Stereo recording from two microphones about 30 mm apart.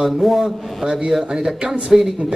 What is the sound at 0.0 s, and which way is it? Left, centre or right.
A woman's voice, centre.